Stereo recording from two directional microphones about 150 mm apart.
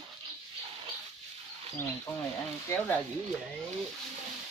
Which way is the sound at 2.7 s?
10° left (ahead or behind).